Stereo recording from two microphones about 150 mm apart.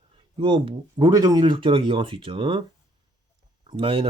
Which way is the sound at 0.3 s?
35° right (ahead or behind).